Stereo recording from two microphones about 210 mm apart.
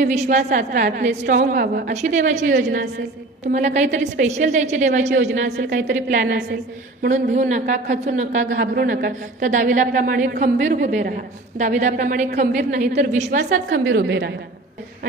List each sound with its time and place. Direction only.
0.1 s a woman's voice: 35° right (ahead or behind)
5.6 s a woman's voice: 55° right (ahead or behind)
7.1 s a woman's voice: 35° right (ahead or behind)
13.8 s a woman's voice: 55° right (ahead or behind)